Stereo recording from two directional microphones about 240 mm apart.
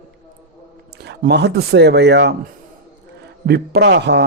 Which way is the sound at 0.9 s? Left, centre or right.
Right.